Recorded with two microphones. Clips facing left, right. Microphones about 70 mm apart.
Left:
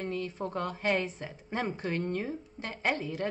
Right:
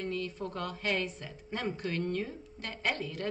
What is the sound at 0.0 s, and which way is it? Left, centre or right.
Speech, left.